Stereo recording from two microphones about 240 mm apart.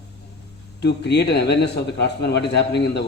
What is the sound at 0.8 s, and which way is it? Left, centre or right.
A man's voice, left.